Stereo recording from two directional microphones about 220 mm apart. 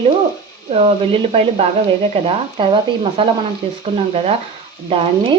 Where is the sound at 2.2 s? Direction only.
25° right (ahead or behind).